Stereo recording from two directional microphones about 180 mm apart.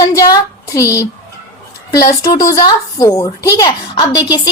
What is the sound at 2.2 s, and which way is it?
A woman's voice, 20° left (ahead or behind).